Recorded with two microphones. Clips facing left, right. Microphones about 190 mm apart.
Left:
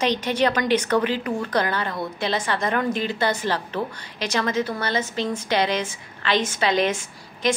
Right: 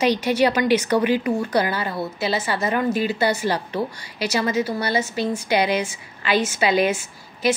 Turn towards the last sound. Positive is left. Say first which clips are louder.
# right 2 dB
turn(degrees=-5)  # may be behind; listen again after turning